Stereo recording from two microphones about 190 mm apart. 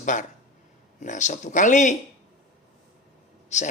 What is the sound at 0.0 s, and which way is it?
Speech, 40° left (ahead or behind).